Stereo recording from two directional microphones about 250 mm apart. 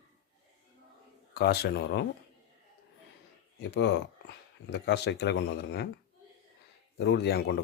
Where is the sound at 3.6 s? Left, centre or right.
Left.